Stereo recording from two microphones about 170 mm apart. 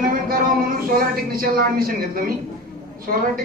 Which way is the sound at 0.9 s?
60° right (ahead or behind).